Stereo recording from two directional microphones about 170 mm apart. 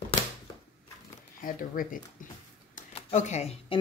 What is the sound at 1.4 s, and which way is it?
Speech, 55° left (ahead or behind).